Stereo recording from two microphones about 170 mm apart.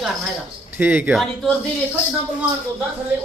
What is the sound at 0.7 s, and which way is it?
Speech, 10° right (ahead or behind).